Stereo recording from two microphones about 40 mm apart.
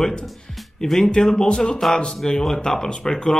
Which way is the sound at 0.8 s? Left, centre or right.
Centre.